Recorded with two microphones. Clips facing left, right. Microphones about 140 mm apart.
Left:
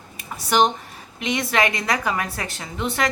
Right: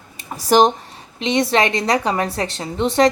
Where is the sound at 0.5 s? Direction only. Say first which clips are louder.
Right 5 dB; 35° right (ahead or behind).